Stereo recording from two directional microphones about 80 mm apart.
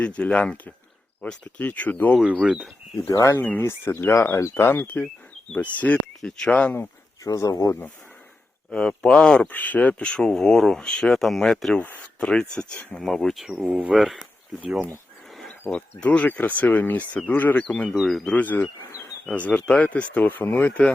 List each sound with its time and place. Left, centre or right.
0.0 s speech: centre
2.4 s speech: centre
3.1 s speech: left
3.3 s speech: centre
3.6 s speech: left; by 6.7 s centre
7.3 s speech: left
8.7 s speech: centre
11.8 s speech: left; by 13.7 s centre
13.7 s speech: centre
13.9 s speech: centre
14.6 s speech: centre
15.7 s speech: centre
17.7 s speech: centre
18.3 s speech: left